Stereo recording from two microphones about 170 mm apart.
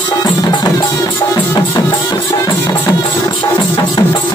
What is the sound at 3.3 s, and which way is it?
Music, 30° left (ahead or behind).